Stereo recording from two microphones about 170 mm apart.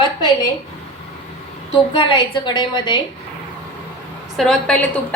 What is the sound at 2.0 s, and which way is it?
A woman's voice, 25° left (ahead or behind).